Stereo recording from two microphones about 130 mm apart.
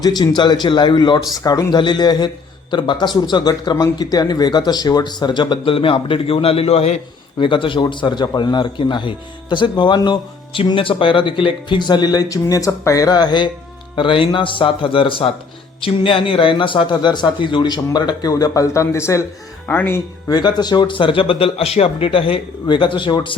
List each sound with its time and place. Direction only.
0.0 s a man's voice: 30° left (ahead or behind); by 7.4 s 50° left (ahead or behind)
7.4 s a man's voice: 40° left (ahead or behind); by 20.0 s 15° left (ahead or behind)
20.2 s a man's voice: 30° left (ahead or behind)